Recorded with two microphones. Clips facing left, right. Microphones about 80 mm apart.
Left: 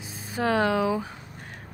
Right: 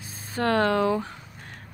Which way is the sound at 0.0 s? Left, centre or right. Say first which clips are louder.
Right 1 dB; centre.